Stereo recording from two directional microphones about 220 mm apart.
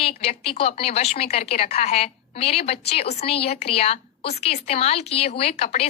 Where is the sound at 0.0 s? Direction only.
25° left (ahead or behind).